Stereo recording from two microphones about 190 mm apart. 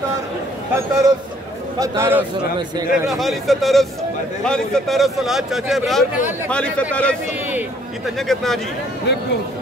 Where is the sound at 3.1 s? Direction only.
Centre (ahead or behind).